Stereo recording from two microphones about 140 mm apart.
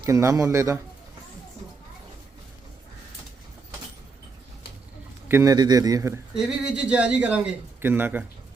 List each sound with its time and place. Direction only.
0.0 s a man's voice: 20° right (ahead or behind)
5.3 s a man's voice: 25° right (ahead or behind)
6.3 s a man's voice: 5° right (ahead or behind)